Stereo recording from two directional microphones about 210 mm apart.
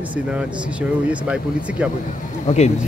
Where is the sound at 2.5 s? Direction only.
35° left (ahead or behind).